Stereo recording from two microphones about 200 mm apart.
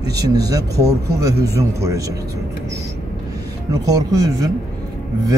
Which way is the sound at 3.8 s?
20° right (ahead or behind).